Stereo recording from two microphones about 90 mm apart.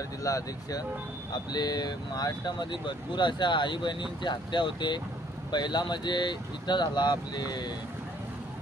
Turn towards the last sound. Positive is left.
turn(degrees=50)  # may be behind; listen again after turning